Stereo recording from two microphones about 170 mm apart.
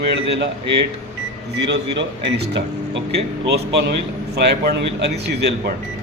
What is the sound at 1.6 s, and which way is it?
Speech, 90° right.